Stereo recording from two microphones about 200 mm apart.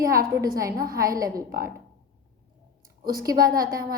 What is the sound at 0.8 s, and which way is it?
Speech, 45° right (ahead or behind).